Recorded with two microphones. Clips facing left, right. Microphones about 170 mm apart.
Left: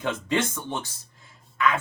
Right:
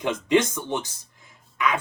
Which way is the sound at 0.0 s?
15° right (ahead or behind).